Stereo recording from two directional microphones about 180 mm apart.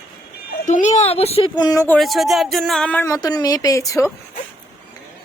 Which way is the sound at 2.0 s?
Centre (ahead or behind).